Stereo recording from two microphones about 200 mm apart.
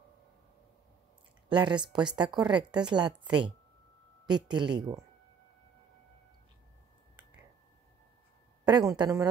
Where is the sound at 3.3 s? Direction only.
25° right (ahead or behind).